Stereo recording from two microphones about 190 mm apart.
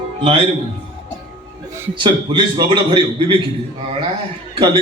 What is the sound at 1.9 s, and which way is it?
A man's voice, 25° right (ahead or behind).